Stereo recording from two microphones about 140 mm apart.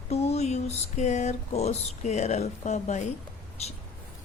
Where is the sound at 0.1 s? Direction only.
50° left (ahead or behind).